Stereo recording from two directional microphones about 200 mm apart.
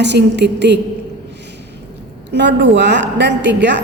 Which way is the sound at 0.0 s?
60° right (ahead or behind).